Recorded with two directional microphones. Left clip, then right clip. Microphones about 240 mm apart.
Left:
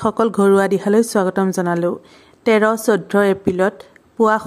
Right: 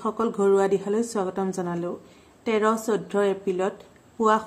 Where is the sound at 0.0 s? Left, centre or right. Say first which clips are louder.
Left 8 dB; left.